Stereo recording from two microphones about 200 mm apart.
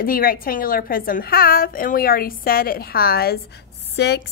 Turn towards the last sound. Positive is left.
turn(degrees=55)  # may be behind; listen again after turning